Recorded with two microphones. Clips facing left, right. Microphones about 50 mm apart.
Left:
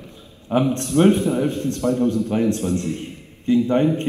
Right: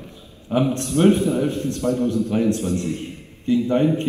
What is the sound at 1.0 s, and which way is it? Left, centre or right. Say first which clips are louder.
A man's voice: left 1 dB; left.